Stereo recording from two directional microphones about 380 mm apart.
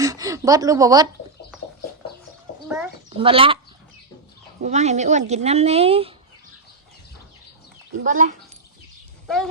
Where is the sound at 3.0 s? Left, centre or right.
Centre.